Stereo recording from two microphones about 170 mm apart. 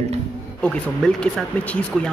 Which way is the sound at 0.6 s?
5° left (ahead or behind).